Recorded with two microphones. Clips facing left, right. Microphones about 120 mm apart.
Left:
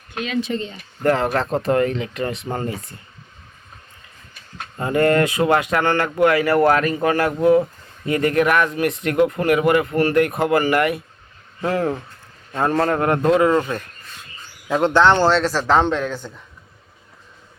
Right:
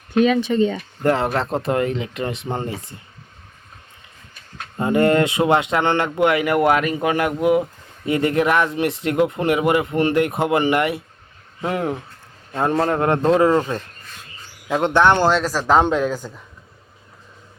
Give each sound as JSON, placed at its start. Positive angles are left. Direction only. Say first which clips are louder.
{"t": 1.0, "sound": "speech", "louder": "left 1 dB", "side_deg": -25}
{"t": 4.8, "sound": "speech", "louder": "right 1 dB", "side_deg": -20}
{"t": 14.7, "sound": "speech", "louder": "left 1 dB", "side_deg": -15}